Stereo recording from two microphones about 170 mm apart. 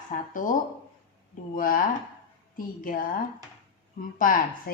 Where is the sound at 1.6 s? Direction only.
55° left (ahead or behind).